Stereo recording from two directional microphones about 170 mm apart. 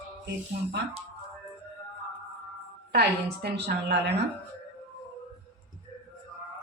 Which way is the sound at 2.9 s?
70° right (ahead or behind).